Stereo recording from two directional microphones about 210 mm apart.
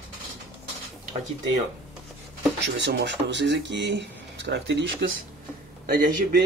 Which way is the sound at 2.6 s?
55° right (ahead or behind).